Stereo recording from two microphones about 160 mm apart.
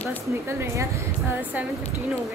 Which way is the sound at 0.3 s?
15° right (ahead or behind).